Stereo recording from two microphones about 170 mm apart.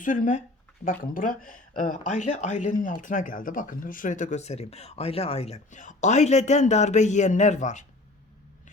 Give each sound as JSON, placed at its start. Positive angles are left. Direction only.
{"t": 0.0, "sound": "speech", "side_deg": 50}